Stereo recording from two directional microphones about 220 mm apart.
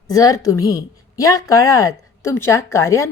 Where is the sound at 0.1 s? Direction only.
15° left (ahead or behind).